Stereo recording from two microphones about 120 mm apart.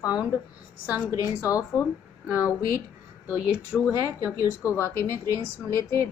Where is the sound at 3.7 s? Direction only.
10° right (ahead or behind).